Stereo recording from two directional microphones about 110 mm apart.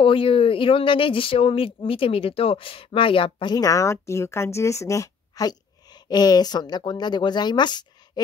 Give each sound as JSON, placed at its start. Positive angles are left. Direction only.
{"t": 0.0, "sound": "speech", "side_deg": 55}
{"t": 3.5, "sound": "speech", "side_deg": 30}